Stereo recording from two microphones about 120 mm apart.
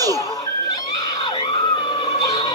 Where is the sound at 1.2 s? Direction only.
45° left (ahead or behind).